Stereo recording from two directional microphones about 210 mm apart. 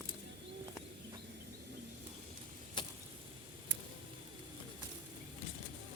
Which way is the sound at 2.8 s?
20° left (ahead or behind).